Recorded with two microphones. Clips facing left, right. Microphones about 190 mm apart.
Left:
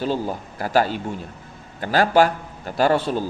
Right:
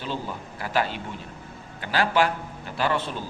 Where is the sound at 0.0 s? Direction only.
40° left (ahead or behind).